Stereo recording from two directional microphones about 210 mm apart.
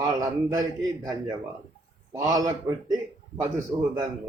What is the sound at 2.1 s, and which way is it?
A man's voice, 15° right (ahead or behind).